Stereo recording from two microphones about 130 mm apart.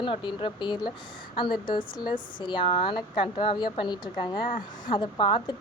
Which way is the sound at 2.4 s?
40° left (ahead or behind).